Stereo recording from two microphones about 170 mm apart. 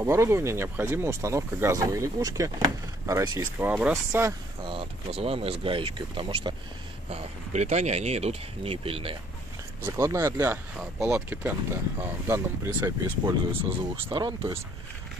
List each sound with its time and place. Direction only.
0.0 s speech: 15° right (ahead or behind)
4.6 s speech: 35° right (ahead or behind)
9.8 s speech: 15° right (ahead or behind)